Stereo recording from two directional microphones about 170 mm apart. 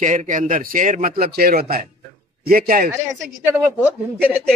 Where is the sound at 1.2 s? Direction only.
60° right (ahead or behind).